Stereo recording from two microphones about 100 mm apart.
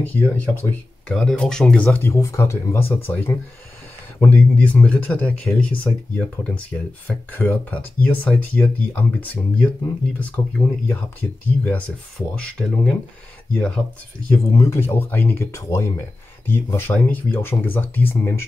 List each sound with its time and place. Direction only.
0.0 s speech: 15° left (ahead or behind)
1.1 s speech: 5° left (ahead or behind)
2.0 s speech: 30° left (ahead or behind); by 12.9 s 10° left (ahead or behind)
14.5 s speech: 30° left (ahead or behind)